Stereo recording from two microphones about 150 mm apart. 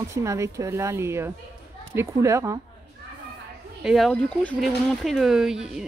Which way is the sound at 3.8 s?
Centre (ahead or behind).